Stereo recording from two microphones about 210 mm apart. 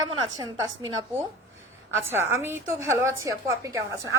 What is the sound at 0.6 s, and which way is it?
A woman's voice, 15° right (ahead or behind).